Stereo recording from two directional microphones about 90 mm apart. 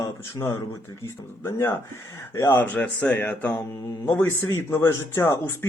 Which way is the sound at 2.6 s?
20° left (ahead or behind).